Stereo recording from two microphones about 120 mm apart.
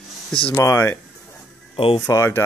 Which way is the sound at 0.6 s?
20° left (ahead or behind).